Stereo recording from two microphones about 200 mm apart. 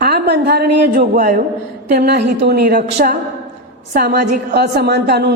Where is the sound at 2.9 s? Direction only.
35° right (ahead or behind).